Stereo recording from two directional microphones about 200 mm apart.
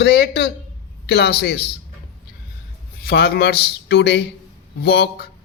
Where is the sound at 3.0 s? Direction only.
50° left (ahead or behind).